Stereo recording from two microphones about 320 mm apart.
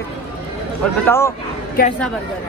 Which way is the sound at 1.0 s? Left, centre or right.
Centre.